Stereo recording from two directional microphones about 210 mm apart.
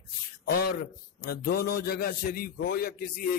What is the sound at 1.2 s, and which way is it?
Speech, 45° left (ahead or behind).